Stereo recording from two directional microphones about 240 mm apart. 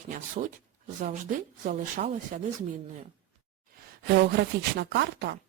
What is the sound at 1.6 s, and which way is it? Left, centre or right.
Speech, right.